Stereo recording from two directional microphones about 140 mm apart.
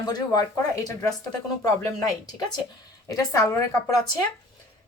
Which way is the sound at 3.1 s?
25° left (ahead or behind).